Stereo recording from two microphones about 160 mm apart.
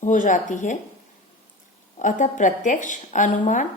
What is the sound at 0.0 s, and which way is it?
Speech, 55° left (ahead or behind).